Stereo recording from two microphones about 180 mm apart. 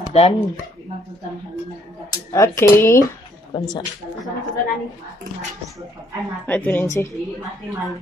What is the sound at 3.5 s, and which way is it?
Speech, 25° left (ahead or behind).